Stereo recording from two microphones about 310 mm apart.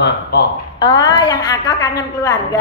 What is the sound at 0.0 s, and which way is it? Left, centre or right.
Speech, left.